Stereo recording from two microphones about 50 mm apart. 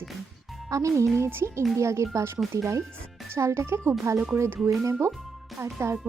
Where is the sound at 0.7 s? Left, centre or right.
Right.